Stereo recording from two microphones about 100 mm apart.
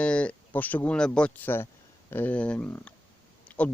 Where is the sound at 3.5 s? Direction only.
15° left (ahead or behind).